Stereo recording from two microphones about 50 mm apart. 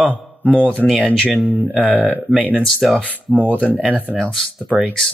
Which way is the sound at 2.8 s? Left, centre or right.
Centre.